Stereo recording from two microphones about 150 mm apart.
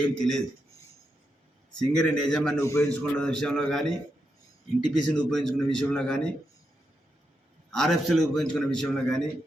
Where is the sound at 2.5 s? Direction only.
20° left (ahead or behind).